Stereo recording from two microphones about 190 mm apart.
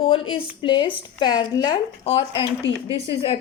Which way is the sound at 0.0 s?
25° left (ahead or behind).